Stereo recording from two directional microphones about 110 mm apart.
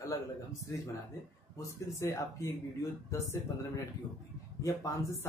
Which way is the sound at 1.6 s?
30° left (ahead or behind).